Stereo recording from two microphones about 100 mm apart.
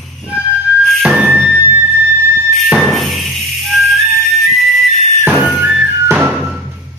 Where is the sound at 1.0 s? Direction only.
15° right (ahead or behind).